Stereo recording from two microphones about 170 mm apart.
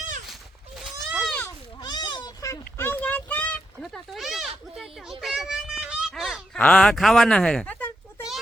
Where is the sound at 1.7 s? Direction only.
25° left (ahead or behind); by 7.9 s 10° left (ahead or behind).